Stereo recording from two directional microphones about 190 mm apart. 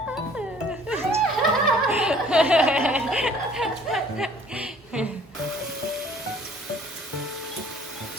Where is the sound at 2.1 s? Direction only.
5° right (ahead or behind).